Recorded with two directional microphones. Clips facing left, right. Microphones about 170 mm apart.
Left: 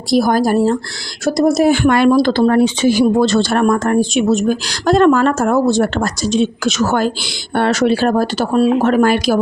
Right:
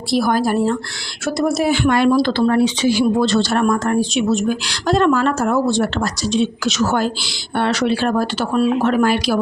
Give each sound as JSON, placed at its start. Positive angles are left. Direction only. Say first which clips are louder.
{"t": 0.1, "sound": "speech", "louder": "left 4 dB", "side_deg": 40}
{"t": 1.9, "sound": "speech", "louder": "left 3 dB", "side_deg": 55}